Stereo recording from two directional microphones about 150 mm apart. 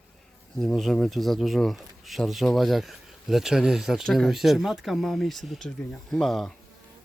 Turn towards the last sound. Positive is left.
turn(degrees=0)  # may be behind; listen again after turning